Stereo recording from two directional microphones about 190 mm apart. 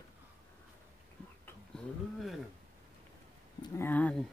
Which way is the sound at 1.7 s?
5° left (ahead or behind).